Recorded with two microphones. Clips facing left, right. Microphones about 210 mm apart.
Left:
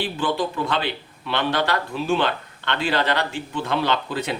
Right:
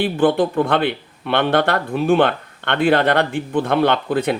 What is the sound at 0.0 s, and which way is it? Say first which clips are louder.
Speech: right 8 dB; 55° right (ahead or behind).